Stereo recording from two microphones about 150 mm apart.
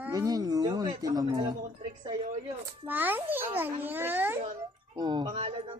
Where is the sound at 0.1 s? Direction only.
25° right (ahead or behind).